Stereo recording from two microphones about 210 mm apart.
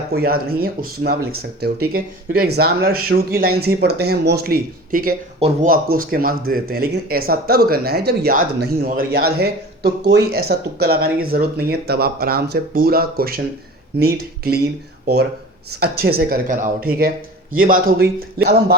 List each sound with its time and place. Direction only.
0.1 s speech: 45° right (ahead or behind)